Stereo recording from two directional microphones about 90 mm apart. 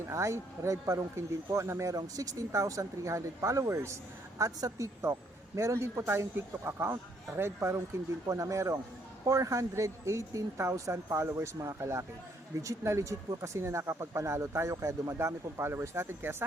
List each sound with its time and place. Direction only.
0.0 s speech: 35° right (ahead or behind)
5.1 s a man's voice: 30° right (ahead or behind)